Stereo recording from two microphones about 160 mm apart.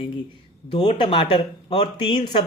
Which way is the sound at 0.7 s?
30° left (ahead or behind).